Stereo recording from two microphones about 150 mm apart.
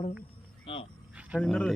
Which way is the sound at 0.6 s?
35° left (ahead or behind).